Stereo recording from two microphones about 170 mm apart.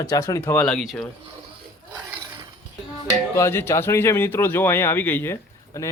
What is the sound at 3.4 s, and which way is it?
Speech, 15° left (ahead or behind).